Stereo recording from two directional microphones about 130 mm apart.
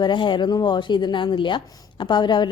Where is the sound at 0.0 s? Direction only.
35° left (ahead or behind).